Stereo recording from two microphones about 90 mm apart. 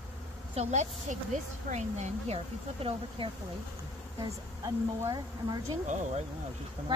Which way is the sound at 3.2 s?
90° right.